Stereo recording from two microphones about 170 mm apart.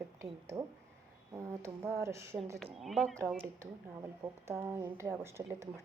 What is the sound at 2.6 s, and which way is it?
Speech, centre (ahead or behind).